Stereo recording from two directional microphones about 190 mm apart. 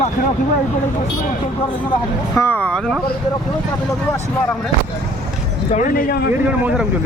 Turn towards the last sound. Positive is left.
turn(degrees=50)  # may be behind; listen again after turning